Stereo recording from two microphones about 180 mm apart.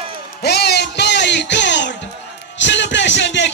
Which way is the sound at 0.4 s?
65° left (ahead or behind).